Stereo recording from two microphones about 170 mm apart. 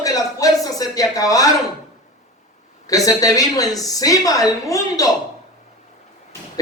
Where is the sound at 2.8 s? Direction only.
20° left (ahead or behind).